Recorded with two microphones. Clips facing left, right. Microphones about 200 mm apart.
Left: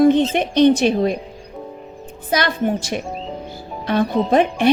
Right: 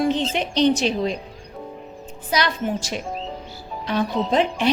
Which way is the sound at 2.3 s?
55° left (ahead or behind).